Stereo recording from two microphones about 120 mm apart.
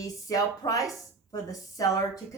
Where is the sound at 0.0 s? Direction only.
30° left (ahead or behind).